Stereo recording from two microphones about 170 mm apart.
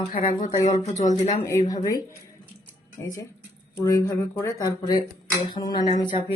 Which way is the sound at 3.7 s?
20° left (ahead or behind).